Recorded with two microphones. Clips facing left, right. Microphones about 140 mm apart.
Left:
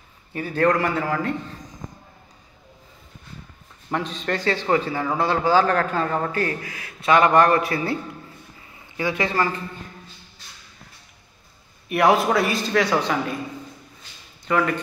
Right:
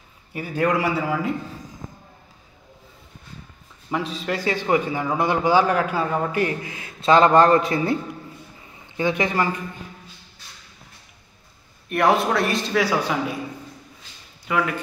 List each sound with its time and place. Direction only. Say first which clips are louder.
0.3 s a man's voice: left 2 dB; 10° right (ahead or behind)
3.9 s a man's voice: even; 5° right (ahead or behind)
11.9 s a man's voice: left 1 dB; centre (ahead or behind)
14.4 s speech: left 2 dB; 5° right (ahead or behind)